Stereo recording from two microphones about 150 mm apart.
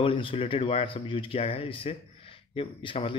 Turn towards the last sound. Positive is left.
turn(degrees=35)  # may be behind; listen again after turning